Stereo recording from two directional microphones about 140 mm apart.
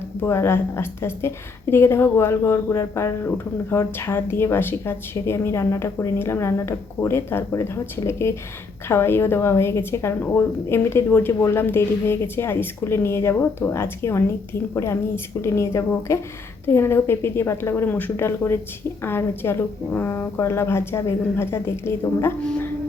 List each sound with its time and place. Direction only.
0.2 s a woman's voice: 15° left (ahead or behind)